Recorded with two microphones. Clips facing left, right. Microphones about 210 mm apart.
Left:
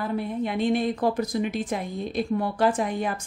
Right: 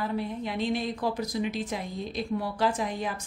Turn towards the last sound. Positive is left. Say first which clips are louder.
# left 5 dB
turn(degrees=55)  # may be behind; listen again after turning